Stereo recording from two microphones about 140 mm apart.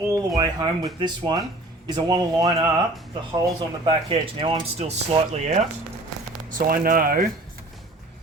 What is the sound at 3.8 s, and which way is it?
Speech, 40° right (ahead or behind).